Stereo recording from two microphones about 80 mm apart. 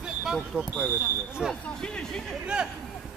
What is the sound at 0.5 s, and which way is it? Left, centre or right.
Speech, centre.